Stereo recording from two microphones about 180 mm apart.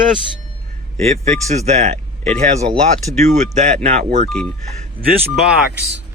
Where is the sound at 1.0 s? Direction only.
40° right (ahead or behind).